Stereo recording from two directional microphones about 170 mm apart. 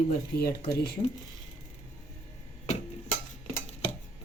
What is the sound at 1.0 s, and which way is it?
Speech, 35° left (ahead or behind).